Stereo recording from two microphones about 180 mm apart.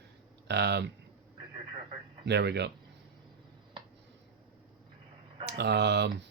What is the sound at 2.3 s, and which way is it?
Speech, 70° right (ahead or behind).